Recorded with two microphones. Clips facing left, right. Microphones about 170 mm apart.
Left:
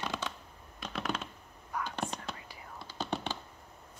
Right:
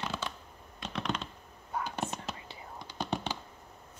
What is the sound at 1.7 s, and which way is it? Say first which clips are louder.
Whispering: right 1 dB; 25° right (ahead or behind).